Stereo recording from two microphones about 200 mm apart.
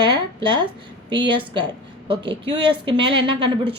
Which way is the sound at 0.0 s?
20° right (ahead or behind).